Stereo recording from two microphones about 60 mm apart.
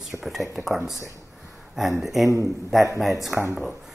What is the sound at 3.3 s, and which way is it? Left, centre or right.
Speech, centre.